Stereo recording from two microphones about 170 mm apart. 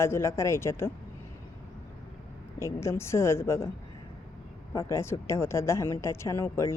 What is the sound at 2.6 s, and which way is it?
Speech, 15° left (ahead or behind).